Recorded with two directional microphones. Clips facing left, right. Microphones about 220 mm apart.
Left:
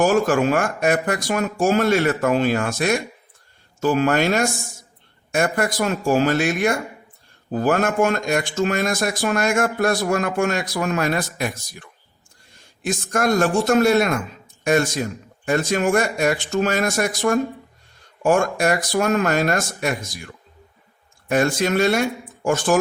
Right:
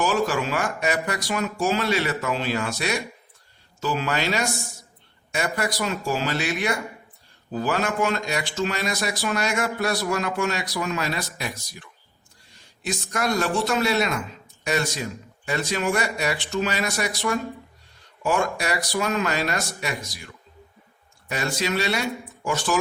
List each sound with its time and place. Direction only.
0.0 s speech: 50° left (ahead or behind)